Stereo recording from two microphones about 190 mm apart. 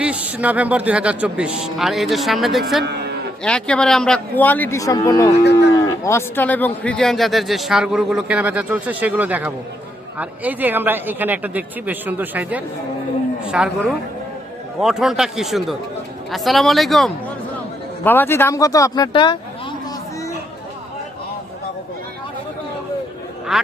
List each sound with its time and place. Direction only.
0.0 s speech: 5° right (ahead or behind)
2.8 s a sound: 60° right (ahead or behind)
3.4 s speech: 5° left (ahead or behind)
5.4 s livestock: 60° left (ahead or behind)
5.8 s speech: 15° left (ahead or behind)
23.5 s speech: centre (ahead or behind)